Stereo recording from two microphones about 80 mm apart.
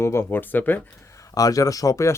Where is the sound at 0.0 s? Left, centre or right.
Left.